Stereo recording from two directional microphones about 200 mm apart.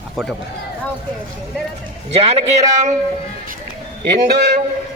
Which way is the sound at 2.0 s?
30° right (ahead or behind).